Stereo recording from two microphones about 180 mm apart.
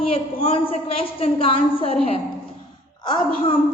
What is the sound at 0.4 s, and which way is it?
A woman's voice, 30° left (ahead or behind).